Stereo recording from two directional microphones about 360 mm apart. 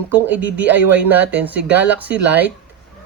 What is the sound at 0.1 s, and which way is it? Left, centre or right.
Speech, centre.